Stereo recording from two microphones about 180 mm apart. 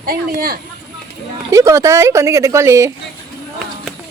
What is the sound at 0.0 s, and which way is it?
Speech, 55° right (ahead or behind).